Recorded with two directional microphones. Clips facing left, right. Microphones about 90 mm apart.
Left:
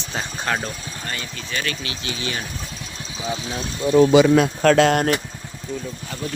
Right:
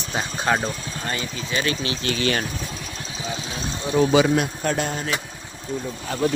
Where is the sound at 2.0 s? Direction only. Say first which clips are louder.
Right 6 dB; 65° right (ahead or behind).